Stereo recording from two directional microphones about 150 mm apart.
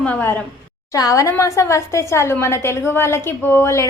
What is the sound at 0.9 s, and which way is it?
A woman's voice, 20° left (ahead or behind).